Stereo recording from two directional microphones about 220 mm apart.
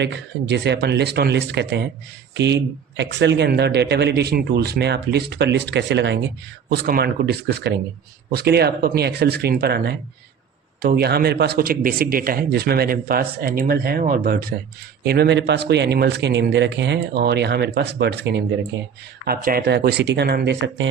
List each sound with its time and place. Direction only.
0.0 s a man's voice: 50° right (ahead or behind)